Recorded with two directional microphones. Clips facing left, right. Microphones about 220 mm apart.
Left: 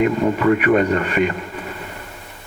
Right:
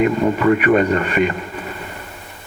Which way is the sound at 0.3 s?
20° right (ahead or behind).